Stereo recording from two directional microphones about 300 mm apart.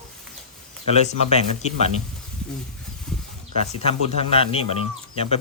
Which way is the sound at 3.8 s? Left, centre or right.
Centre.